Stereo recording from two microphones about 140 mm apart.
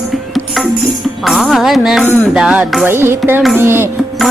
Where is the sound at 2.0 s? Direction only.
15° left (ahead or behind).